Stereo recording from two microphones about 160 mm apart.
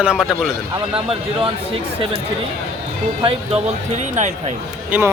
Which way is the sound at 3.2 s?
35° right (ahead or behind).